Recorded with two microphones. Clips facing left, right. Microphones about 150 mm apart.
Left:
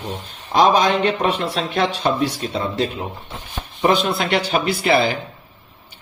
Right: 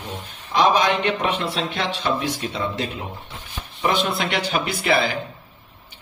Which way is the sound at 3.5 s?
35° left (ahead or behind).